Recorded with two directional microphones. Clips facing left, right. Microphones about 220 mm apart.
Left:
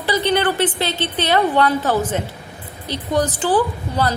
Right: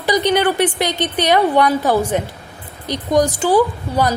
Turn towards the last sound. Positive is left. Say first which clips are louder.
# right 3 dB
turn(degrees=-15)  # may be behind; listen again after turning